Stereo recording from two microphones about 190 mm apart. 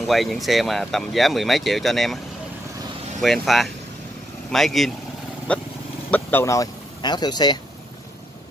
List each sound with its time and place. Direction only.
0.0 s speech: centre (ahead or behind)
3.2 s speech: centre (ahead or behind); by 7.5 s 20° left (ahead or behind)